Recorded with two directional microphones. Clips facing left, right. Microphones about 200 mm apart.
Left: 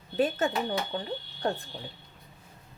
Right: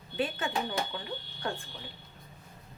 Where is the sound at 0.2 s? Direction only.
40° left (ahead or behind).